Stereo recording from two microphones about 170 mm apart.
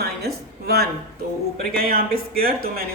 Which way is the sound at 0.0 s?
70° right (ahead or behind).